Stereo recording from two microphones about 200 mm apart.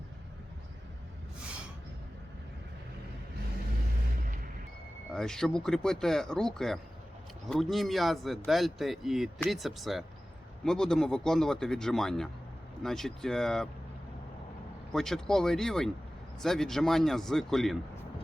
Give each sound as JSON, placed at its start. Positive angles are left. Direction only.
{"t": 5.1, "sound": "speech", "side_deg": 0}
{"t": 14.9, "sound": "speech", "side_deg": 0}